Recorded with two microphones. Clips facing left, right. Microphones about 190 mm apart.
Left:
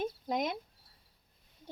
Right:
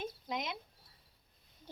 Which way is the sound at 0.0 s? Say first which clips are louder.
Left 6 dB; 50° left (ahead or behind).